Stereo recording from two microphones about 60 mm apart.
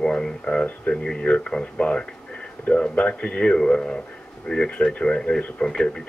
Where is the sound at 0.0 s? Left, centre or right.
Centre.